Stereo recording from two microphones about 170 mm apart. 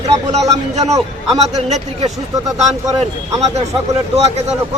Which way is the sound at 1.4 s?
40° right (ahead or behind).